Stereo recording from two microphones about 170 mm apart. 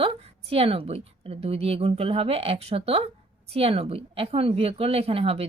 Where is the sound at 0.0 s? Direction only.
35° right (ahead or behind).